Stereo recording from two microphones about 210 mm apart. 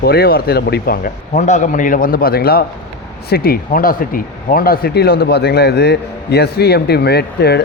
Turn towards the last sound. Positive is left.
turn(degrees=50)  # may be behind; listen again after turning